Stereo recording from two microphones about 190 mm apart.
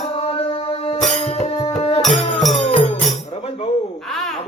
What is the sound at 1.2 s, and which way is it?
Music, 30° left (ahead or behind).